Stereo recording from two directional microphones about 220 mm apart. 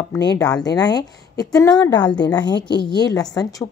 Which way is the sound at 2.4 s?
50° left (ahead or behind).